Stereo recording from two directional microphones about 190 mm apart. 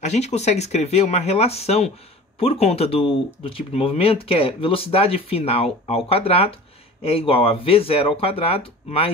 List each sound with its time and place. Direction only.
0.0 s speech: 35° left (ahead or behind)